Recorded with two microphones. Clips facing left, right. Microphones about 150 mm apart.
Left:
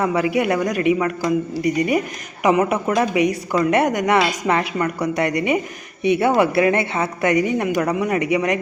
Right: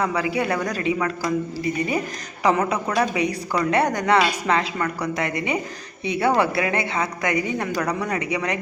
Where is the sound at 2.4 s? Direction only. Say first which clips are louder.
Left 3 dB; 15° left (ahead or behind).